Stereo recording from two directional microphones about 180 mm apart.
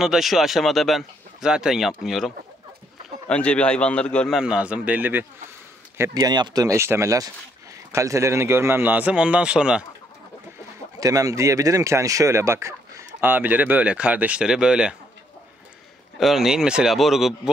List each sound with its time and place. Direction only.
0.0 s speech: centre (ahead or behind)
11.0 s speech: 20° right (ahead or behind)
16.2 s speech: centre (ahead or behind)